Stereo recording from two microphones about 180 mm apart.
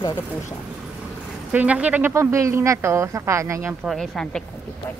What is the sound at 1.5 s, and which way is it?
Speech, 10° right (ahead or behind).